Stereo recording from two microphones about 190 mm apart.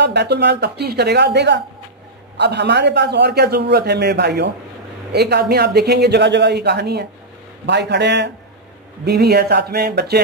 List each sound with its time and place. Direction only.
0.0 s a man's voice: 60° right (ahead or behind)